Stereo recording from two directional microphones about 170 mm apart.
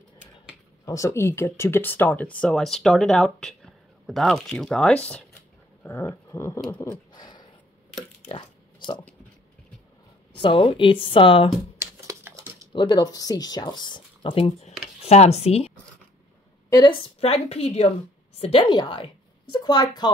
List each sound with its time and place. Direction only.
0.8 s speech: 15° left (ahead or behind)
8.3 s a sound: 25° left (ahead or behind)
10.4 s a woman's voice: 30° left (ahead or behind)
11.8 s a sound: 15° right (ahead or behind)
12.7 s speech: 25° left (ahead or behind)
16.7 s a woman's voice: 30° left (ahead or behind)